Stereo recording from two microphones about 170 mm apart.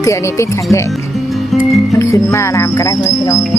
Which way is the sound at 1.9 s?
15° left (ahead or behind).